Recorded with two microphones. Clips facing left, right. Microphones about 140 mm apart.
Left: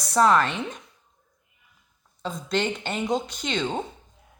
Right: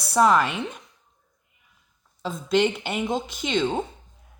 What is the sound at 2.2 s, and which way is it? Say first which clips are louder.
Speech: right 5 dB; 5° right (ahead or behind).